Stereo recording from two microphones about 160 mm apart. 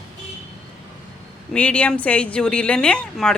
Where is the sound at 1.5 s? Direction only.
10° left (ahead or behind).